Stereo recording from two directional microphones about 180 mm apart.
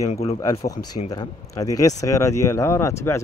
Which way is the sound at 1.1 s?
20° left (ahead or behind).